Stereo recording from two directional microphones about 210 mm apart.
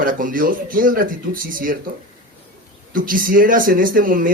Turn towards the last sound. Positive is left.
turn(degrees=-40)  # may be behind; listen again after turning